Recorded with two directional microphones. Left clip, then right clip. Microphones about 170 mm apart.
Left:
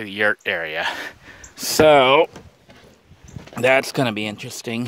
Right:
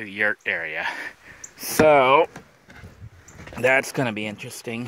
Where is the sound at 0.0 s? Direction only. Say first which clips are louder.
Left 3 dB; 30° left (ahead or behind).